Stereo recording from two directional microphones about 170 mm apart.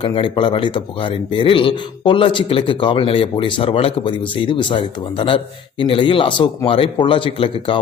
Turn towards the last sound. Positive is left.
turn(degrees=30)  # may be behind; listen again after turning